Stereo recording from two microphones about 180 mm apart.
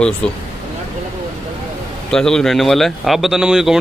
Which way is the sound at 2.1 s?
5° left (ahead or behind).